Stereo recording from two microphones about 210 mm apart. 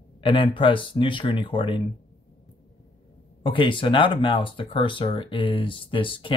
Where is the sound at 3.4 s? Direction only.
25° left (ahead or behind).